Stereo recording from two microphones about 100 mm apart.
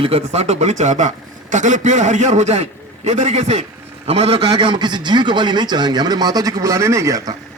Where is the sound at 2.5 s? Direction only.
90° right; by 7.4 s 35° right (ahead or behind).